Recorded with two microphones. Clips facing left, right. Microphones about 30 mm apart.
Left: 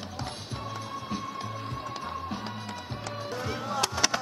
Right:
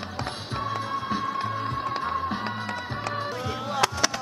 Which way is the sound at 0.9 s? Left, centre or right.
Right.